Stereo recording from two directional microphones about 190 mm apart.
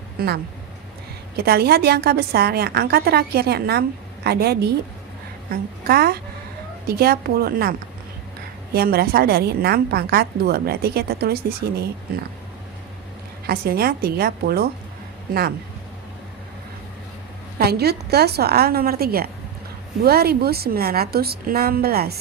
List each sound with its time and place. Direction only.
0.2 s a woman's voice: 50° right (ahead or behind)
1.4 s a woman's voice: 55° right (ahead or behind)
13.5 s a woman's voice: 50° right (ahead or behind)
17.6 s a woman's voice: 55° right (ahead or behind)